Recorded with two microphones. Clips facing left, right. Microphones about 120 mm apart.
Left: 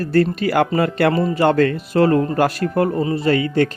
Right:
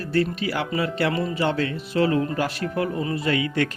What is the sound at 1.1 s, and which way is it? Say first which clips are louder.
A man's voice: left 8 dB; 40° left (ahead or behind).